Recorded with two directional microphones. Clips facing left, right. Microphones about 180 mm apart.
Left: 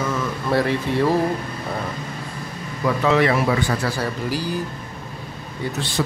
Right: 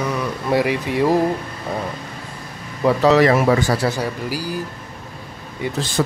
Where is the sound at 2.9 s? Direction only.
35° right (ahead or behind).